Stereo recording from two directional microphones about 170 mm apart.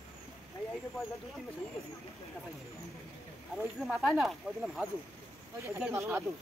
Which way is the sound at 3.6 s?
5° right (ahead or behind).